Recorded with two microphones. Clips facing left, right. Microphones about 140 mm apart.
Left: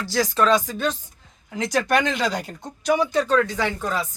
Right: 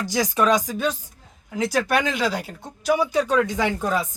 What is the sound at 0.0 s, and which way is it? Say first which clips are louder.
Speech: even; 15° right (ahead or behind).